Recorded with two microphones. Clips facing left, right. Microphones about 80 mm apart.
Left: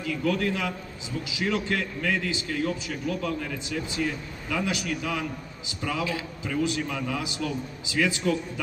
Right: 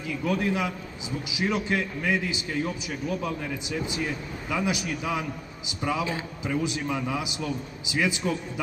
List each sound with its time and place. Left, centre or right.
0.0 s a man's voice: right